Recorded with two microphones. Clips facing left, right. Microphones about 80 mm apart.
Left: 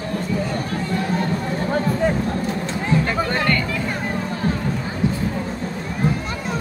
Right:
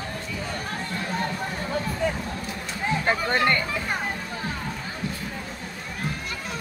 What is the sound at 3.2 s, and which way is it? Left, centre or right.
Music, right.